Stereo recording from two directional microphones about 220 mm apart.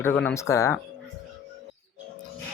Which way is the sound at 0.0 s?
10° left (ahead or behind).